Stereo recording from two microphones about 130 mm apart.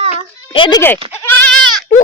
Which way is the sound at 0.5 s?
40° left (ahead or behind).